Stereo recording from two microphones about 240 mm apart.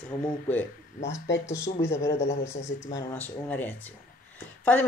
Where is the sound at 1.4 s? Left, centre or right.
Centre.